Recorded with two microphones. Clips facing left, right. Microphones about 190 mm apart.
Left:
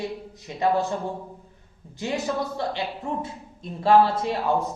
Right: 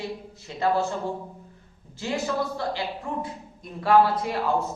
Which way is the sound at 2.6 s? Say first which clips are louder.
Left 1 dB; 25° left (ahead or behind).